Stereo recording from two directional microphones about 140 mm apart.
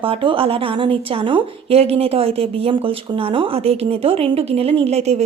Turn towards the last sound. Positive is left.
turn(degrees=-50)  # may be behind; listen again after turning